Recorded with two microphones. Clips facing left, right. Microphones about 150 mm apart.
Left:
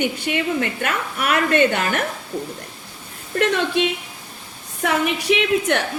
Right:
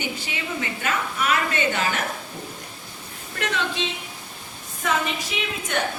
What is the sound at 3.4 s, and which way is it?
Speech, 55° left (ahead or behind).